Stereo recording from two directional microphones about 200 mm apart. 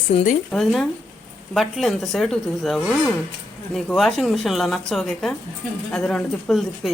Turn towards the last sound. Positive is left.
turn(degrees=0)  # may be behind; listen again after turning